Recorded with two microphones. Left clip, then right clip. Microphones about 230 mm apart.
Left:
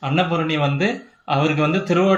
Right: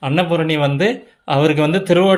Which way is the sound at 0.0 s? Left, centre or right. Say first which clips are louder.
Right 3 dB; right.